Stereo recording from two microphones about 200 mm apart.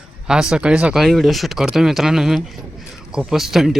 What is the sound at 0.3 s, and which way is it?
Speech, 5° right (ahead or behind).